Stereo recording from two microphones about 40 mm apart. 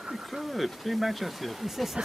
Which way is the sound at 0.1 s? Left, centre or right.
Centre.